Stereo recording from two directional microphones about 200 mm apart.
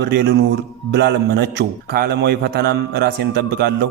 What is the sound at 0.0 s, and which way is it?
A man's voice, 55° right (ahead or behind).